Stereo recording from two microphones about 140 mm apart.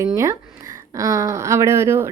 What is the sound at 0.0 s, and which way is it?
Speech, 20° right (ahead or behind).